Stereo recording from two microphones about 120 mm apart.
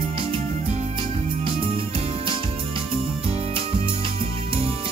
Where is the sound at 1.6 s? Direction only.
45° right (ahead or behind).